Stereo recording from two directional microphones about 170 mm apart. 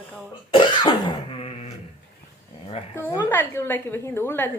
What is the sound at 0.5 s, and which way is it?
Cough, 25° left (ahead or behind).